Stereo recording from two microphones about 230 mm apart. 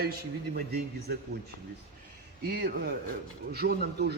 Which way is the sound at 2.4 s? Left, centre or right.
Right.